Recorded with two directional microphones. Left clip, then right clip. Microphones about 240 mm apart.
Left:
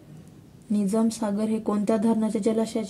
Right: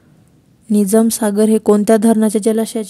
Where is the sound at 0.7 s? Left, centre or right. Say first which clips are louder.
Right 12 dB; right.